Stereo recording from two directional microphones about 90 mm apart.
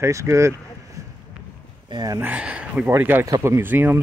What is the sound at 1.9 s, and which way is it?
Speech, 40° right (ahead or behind).